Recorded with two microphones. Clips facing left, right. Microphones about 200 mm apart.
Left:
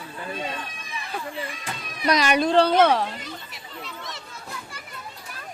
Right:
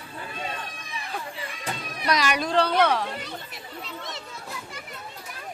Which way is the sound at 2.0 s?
25° left (ahead or behind).